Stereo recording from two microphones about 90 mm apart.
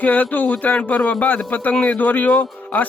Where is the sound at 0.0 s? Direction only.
20° left (ahead or behind).